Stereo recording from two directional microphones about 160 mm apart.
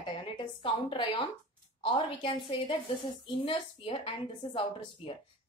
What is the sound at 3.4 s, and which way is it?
A woman's voice, 35° left (ahead or behind).